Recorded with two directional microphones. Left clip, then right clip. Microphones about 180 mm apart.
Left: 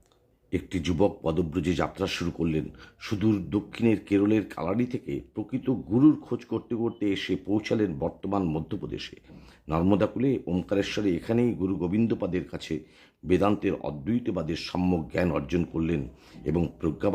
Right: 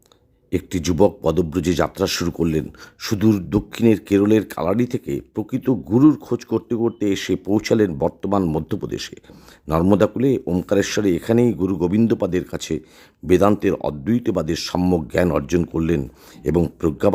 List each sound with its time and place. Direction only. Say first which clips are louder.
0.5 s speech: right 7 dB; 35° right (ahead or behind)